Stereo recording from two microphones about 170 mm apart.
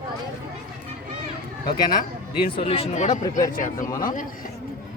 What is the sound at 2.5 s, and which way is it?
Speech, 35° left (ahead or behind).